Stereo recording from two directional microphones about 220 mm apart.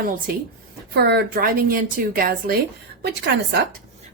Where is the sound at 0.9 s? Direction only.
50° right (ahead or behind).